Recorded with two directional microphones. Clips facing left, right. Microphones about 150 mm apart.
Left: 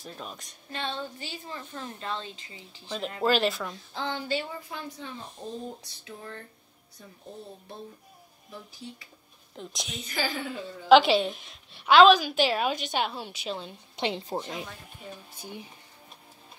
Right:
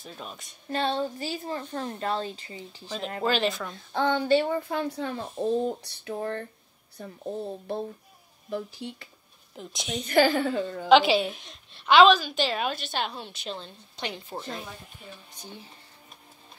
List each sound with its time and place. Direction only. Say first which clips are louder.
0.0 s a woman's voice: even; centre (ahead or behind)
0.7 s speech: right 7 dB; 40° right (ahead or behind)
3.2 s a woman's voice: left 1 dB; centre (ahead or behind)
3.9 s speech: right 10 dB; 55° right (ahead or behind)
8.5 s speech: right 10 dB; 65° right (ahead or behind)
9.6 s a woman's voice: right 5 dB; centre (ahead or behind)
10.0 s speech: right 11 dB; 60° right (ahead or behind)
10.9 s a woman's voice: left 1 dB; centre (ahead or behind)
13.9 s a woman's voice: left 5 dB; 25° left (ahead or behind)
15.3 s a woman's voice: left 3 dB; 15° left (ahead or behind)